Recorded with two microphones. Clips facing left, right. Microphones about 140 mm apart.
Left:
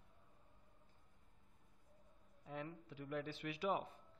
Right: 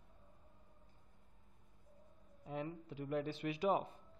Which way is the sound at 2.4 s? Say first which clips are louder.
Right 5 dB; 20° right (ahead or behind).